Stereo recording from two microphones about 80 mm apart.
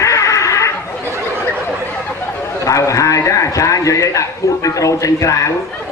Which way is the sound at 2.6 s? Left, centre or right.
Left.